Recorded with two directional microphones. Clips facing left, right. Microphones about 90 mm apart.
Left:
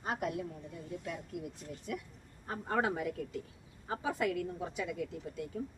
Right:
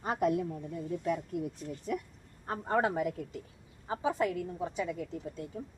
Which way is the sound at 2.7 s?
35° right (ahead or behind).